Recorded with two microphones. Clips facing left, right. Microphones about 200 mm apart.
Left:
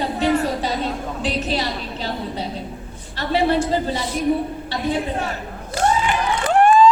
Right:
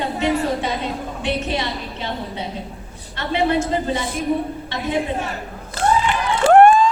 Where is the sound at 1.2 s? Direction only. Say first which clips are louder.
Even; 35° left (ahead or behind).